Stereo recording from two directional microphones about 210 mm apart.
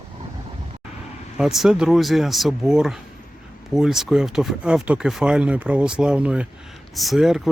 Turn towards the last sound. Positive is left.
turn(degrees=0)  # may be behind; listen again after turning